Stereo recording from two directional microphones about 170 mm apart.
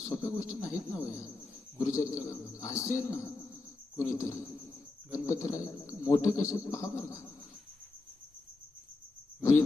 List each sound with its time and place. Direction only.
0.0 s a sound: 20° left (ahead or behind)
0.6 s speech: 20° left (ahead or behind)
9.4 s speech: 15° left (ahead or behind)